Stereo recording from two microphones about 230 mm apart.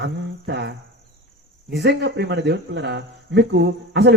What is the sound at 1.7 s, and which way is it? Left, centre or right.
Speech, right.